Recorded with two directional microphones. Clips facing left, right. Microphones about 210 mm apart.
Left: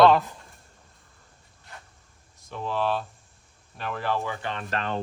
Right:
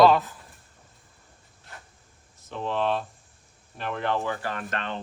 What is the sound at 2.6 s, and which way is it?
Speech, 5° left (ahead or behind).